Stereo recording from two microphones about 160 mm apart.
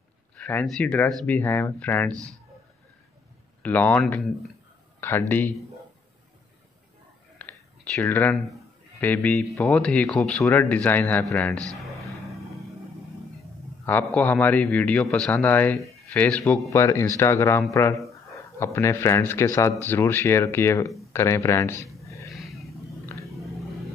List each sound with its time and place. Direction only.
0.4 s speech: 10° left (ahead or behind)
3.6 s speech: 10° left (ahead or behind)
7.3 s whispering: 10° left (ahead or behind)
9.0 s speech: 10° left (ahead or behind)
13.8 s speech: 10° left (ahead or behind)
16.7 s speech: 20° left (ahead or behind)
22.0 s a sound: 20° left (ahead or behind)
22.3 s vehicle: centre (ahead or behind)
23.0 s a sound: 20° left (ahead or behind)